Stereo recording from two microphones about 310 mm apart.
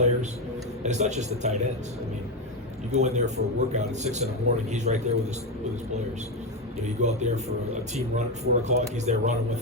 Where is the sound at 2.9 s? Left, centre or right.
Right.